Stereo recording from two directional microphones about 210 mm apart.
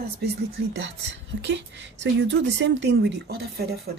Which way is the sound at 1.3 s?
55° right (ahead or behind).